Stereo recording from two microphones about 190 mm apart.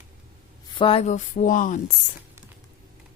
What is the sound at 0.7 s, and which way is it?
Speech, 25° left (ahead or behind).